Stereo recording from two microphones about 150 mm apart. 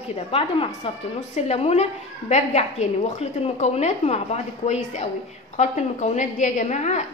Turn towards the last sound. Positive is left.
turn(degrees=50)  # may be behind; listen again after turning